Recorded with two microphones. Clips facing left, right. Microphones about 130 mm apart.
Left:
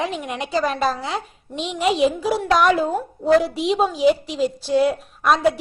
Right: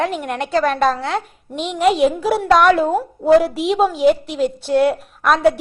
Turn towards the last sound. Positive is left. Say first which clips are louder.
# right 3 dB
turn(degrees=0)  # may be behind; listen again after turning